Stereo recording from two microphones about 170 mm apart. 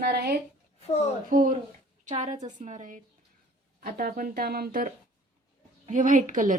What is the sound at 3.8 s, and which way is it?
A woman's voice, 65° right (ahead or behind).